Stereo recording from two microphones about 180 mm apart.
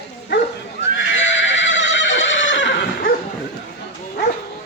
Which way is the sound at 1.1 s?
90° left.